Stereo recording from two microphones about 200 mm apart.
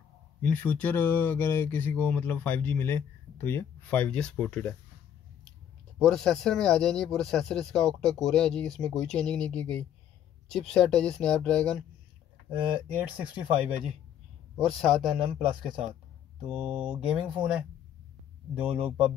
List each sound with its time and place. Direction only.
0.4 s speech: 10° left (ahead or behind)
5.9 s speech: centre (ahead or behind)
12.4 s speech: 25° right (ahead or behind)
12.9 s speech: 5° right (ahead or behind)
16.4 s speech: 5° right (ahead or behind)